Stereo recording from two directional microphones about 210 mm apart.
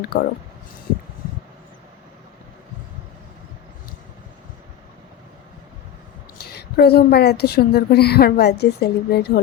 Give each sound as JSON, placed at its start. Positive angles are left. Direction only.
{"t": 0.0, "sound": "a woman's voice", "side_deg": 50}
{"t": 6.4, "sound": "a woman's voice", "side_deg": 50}